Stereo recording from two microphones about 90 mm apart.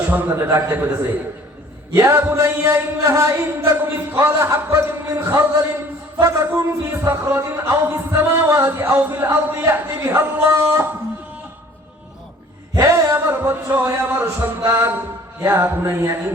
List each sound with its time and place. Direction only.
0.1 s music: 20° right (ahead or behind)
0.3 s music: 30° right (ahead or behind)
12.7 s music: 35° right (ahead or behind)